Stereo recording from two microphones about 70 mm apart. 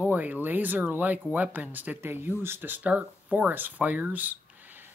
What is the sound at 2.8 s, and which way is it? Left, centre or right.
Speech, centre.